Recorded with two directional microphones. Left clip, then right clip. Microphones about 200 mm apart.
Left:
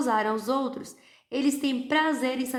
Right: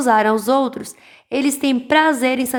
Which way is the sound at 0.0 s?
40° right (ahead or behind).